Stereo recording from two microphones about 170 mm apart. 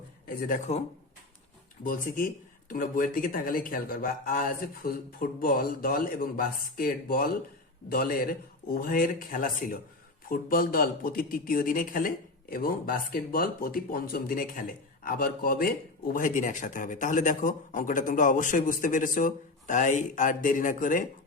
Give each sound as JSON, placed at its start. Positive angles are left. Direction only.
{"t": 0.3, "sound": "speech", "side_deg": 55}
{"t": 1.8, "sound": "speech", "side_deg": 50}